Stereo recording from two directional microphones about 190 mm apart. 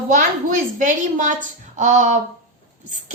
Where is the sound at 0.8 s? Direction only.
40° right (ahead or behind).